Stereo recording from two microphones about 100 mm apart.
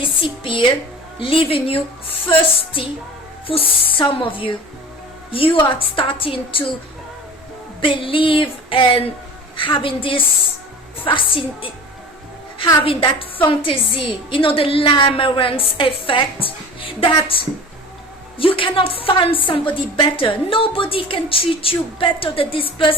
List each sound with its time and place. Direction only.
0.4 s a woman's voice: 55° left (ahead or behind)
2.2 s music: 65° left (ahead or behind)
3.4 s a woman's voice: 65° left (ahead or behind)
7.8 s a woman's voice: 60° left (ahead or behind)
12.8 s a woman's voice: 65° left (ahead or behind)